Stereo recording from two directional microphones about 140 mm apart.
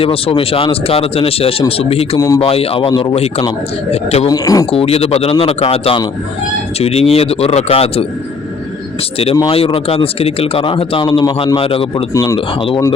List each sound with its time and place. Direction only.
0.0 s speech: 40° left (ahead or behind)
2.1 s speech: 25° left (ahead or behind)
2.4 s speech: 45° left (ahead or behind)
3.9 s speech: 45° left (ahead or behind)
4.3 s speech: 25° left (ahead or behind)
4.6 s speech: 45° left (ahead or behind)
9.1 s speech: 40° left (ahead or behind)
12.1 s speech: 25° left (ahead or behind)